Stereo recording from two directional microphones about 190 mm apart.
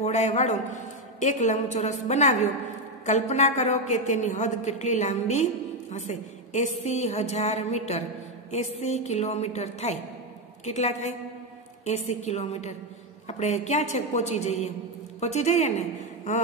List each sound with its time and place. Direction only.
0.0 s a woman's voice: 35° left (ahead or behind)